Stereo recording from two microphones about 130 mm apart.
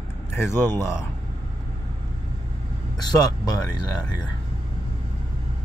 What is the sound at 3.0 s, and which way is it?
Speech, 30° left (ahead or behind).